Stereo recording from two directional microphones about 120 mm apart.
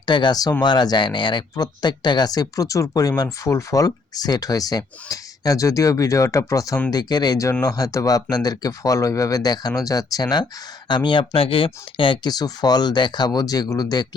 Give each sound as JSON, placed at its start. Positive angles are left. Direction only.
{"t": 0.0, "sound": "speech", "side_deg": 40}